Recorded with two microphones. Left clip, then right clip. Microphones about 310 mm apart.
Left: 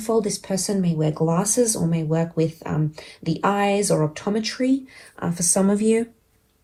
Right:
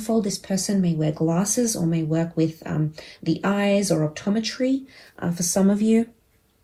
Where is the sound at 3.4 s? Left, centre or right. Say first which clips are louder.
Left 3 dB; centre.